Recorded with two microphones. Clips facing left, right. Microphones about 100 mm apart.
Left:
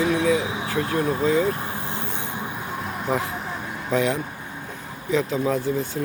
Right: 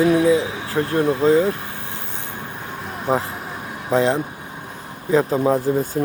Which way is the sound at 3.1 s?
35° right (ahead or behind).